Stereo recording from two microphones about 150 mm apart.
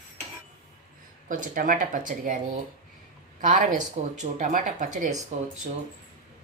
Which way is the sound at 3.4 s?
60° right (ahead or behind).